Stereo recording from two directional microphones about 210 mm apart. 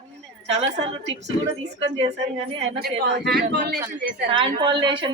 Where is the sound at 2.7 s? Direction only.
50° right (ahead or behind).